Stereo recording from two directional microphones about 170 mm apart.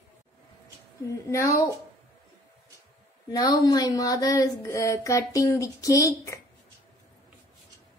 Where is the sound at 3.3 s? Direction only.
20° left (ahead or behind).